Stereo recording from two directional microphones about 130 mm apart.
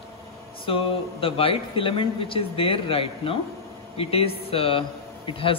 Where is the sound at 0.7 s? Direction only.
45° left (ahead or behind).